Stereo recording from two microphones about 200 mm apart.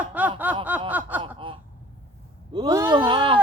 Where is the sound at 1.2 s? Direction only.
25° right (ahead or behind).